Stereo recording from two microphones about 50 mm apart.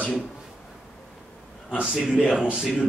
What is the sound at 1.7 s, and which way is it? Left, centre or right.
Speech, centre.